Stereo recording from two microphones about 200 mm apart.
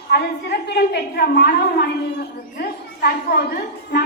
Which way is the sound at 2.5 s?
50° left (ahead or behind).